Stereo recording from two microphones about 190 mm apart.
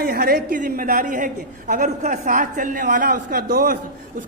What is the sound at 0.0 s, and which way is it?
A man's voice, 50° right (ahead or behind).